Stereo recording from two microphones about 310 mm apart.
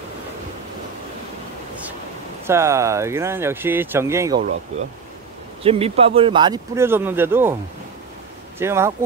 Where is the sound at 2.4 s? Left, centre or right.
Centre.